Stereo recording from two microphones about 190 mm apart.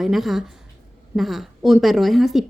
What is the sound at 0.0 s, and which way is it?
A woman's voice, centre (ahead or behind).